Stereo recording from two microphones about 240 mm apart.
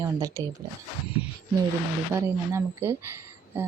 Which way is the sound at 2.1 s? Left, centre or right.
Centre.